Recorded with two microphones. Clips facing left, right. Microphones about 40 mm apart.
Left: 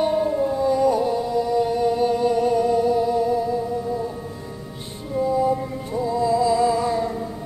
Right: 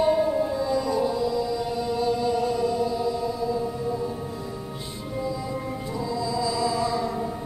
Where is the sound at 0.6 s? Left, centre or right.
Left.